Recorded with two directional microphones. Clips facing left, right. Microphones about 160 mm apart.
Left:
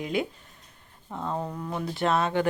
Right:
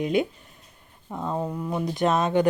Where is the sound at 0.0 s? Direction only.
20° right (ahead or behind).